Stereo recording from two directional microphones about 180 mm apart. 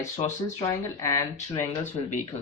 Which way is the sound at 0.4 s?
20° left (ahead or behind).